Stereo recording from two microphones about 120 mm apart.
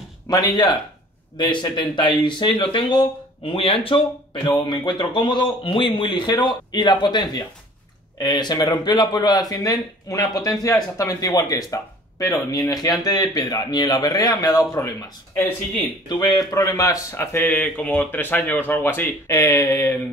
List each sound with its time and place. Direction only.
0.3 s speech: 35° left (ahead or behind)
16.1 s speech: 35° left (ahead or behind)